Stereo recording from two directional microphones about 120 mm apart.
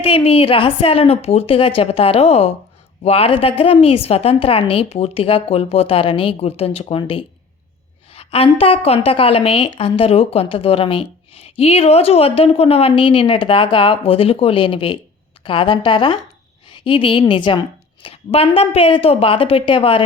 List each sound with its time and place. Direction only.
0.0 s a woman's voice: 55° left (ahead or behind)